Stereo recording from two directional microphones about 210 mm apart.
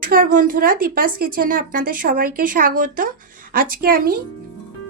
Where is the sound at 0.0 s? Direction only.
40° right (ahead or behind).